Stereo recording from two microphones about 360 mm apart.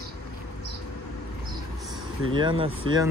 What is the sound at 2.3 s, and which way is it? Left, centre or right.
Speech, centre.